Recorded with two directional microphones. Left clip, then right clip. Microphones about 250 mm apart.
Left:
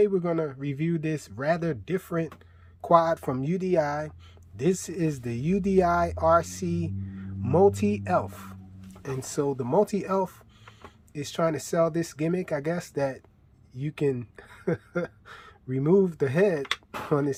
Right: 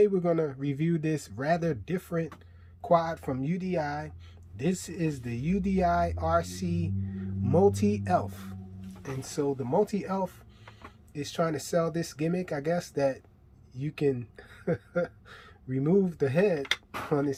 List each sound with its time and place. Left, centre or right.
0.0 s speech: centre